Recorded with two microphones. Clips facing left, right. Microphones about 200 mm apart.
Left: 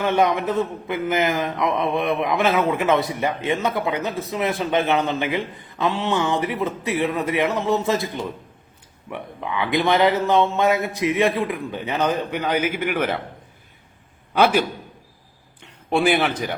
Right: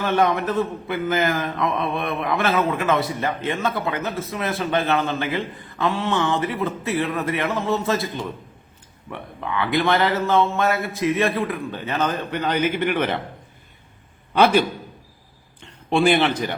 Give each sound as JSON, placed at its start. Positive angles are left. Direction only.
{"t": 0.0, "sound": "a man's voice", "side_deg": 15}
{"t": 14.3, "sound": "a man's voice", "side_deg": 5}
{"t": 15.9, "sound": "a man's voice", "side_deg": 5}